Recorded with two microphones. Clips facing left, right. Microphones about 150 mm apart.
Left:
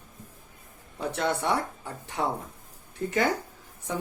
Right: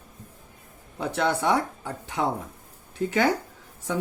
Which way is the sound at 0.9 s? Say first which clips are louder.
Right 3 dB; 90° right.